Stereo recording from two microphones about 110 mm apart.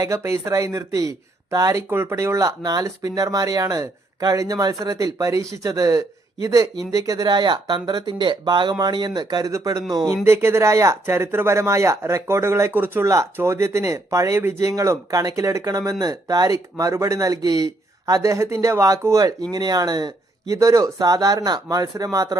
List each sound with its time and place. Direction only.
0.0 s speech: 30° right (ahead or behind)
10.2 s speech: 25° right (ahead or behind)